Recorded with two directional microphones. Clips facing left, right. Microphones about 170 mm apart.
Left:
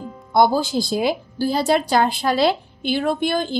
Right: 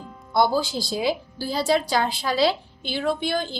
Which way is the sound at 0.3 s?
50° left (ahead or behind).